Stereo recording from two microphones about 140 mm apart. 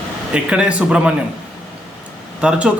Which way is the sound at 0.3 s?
5° right (ahead or behind).